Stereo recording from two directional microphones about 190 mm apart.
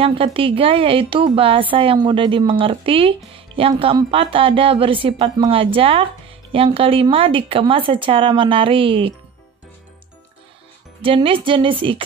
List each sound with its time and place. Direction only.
0.0 s a woman's voice: 30° right (ahead or behind)
11.0 s a woman's voice: 30° right (ahead or behind)